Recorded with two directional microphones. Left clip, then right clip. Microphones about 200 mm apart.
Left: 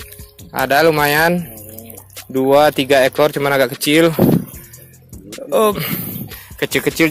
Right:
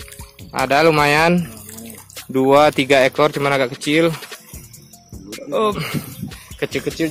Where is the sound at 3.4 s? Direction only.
20° left (ahead or behind).